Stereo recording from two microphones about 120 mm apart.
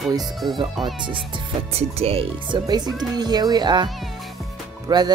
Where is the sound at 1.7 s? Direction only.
55° right (ahead or behind).